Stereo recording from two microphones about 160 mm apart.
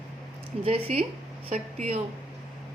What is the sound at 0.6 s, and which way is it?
A woman's voice, 40° right (ahead or behind).